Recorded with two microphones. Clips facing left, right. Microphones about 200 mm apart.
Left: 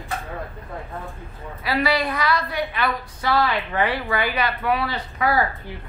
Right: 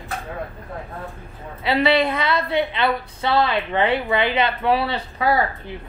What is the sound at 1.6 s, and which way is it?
A woman's voice, 25° right (ahead or behind).